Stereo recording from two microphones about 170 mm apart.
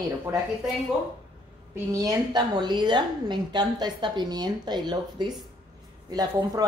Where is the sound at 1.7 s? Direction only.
20° right (ahead or behind).